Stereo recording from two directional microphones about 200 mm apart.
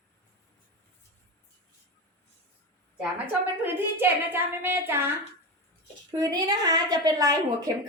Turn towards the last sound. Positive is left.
turn(degrees=-20)  # may be behind; listen again after turning